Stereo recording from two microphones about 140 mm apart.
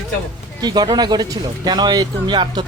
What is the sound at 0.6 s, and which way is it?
Speech, 30° right (ahead or behind).